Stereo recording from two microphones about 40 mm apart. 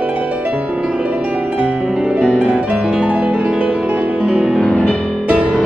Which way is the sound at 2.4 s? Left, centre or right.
Right.